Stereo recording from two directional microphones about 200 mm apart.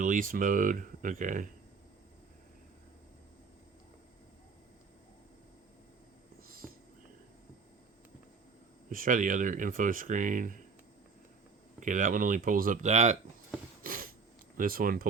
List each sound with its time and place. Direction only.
0.0 s speech: 40° right (ahead or behind)
6.5 s a sound: 45° right (ahead or behind)
8.9 s speech: 45° right (ahead or behind)
11.8 s speech: 40° right (ahead or behind)
13.8 s a sound: 45° right (ahead or behind)
14.5 s speech: 45° right (ahead or behind)